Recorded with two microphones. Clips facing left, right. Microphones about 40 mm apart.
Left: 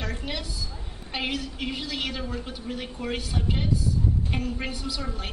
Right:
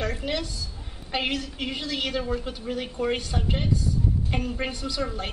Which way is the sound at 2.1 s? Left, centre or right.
Centre.